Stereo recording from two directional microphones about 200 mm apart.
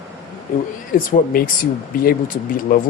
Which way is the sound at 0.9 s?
45° left (ahead or behind).